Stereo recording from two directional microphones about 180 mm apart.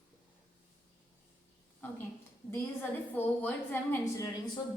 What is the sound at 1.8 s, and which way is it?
Speech, 10° left (ahead or behind).